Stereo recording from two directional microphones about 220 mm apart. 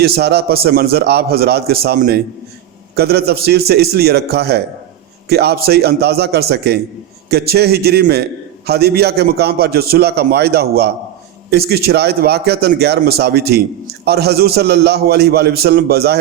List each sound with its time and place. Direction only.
0.0 s a man's voice: 50° right (ahead or behind)